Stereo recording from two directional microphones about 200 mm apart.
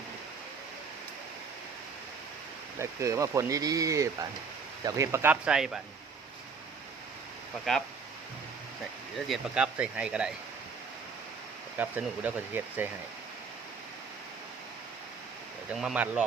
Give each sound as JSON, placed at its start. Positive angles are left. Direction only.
{"t": 2.7, "sound": "speech", "side_deg": -15}
{"t": 7.7, "sound": "speech", "side_deg": 0}
{"t": 9.1, "sound": "speech", "side_deg": -5}
{"t": 11.8, "sound": "speech", "side_deg": -10}
{"t": 15.7, "sound": "speech", "side_deg": 0}